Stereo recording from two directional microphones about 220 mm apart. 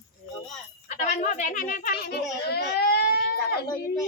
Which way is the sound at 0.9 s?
35° left (ahead or behind).